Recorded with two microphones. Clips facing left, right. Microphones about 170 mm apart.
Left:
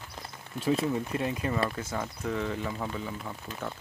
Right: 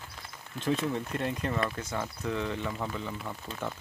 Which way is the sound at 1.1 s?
5° left (ahead or behind).